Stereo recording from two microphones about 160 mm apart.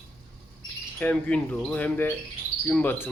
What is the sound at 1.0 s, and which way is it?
Speech, 10° left (ahead or behind).